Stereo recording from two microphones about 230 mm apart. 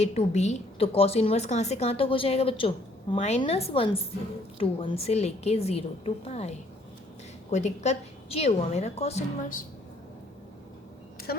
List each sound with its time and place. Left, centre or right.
0.0 s a woman's voice: left
7.5 s a woman's voice: left
11.3 s speech: left